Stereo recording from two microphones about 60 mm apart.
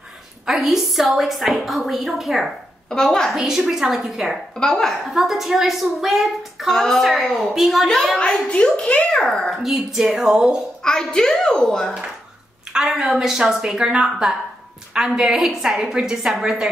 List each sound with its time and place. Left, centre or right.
0.5 s a woman's voice: centre
2.9 s a child's voice: centre
3.3 s a woman's voice: centre
4.6 s a child's voice: centre
5.1 s a woman's voice: centre
8.2 s a child's voice: centre
9.6 s a woman's voice: centre
10.8 s a child's voice: centre
12.7 s a woman's voice: centre